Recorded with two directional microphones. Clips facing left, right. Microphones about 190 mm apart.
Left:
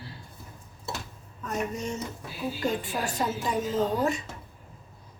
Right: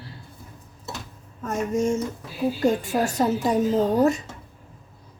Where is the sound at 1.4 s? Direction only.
45° right (ahead or behind).